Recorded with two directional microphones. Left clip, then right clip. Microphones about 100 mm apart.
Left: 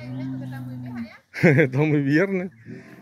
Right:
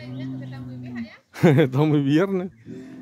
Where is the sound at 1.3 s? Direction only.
55° right (ahead or behind).